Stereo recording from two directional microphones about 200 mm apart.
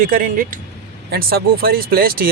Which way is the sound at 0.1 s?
45° right (ahead or behind).